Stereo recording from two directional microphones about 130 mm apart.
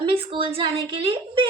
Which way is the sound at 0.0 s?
45° right (ahead or behind).